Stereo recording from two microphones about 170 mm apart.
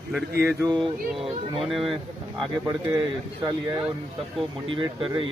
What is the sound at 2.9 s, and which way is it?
Speech, 25° right (ahead or behind).